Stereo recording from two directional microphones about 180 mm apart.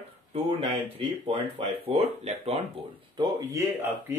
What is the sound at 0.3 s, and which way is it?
Speech, 35° right (ahead or behind).